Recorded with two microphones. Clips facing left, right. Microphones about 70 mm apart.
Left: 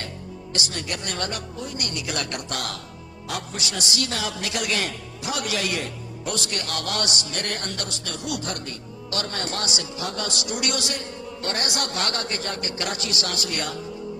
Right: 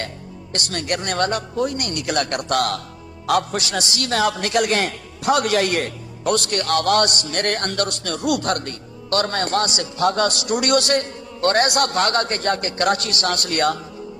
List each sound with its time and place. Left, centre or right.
0.5 s a man's voice: right